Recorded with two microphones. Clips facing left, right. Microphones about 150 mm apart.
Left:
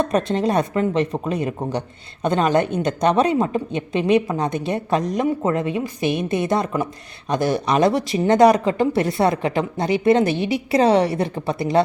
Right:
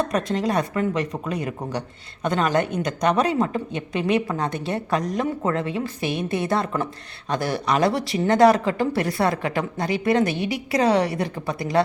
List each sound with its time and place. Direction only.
0.1 s speech: 25° left (ahead or behind)